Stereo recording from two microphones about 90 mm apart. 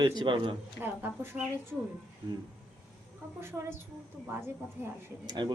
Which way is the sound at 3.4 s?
30° right (ahead or behind).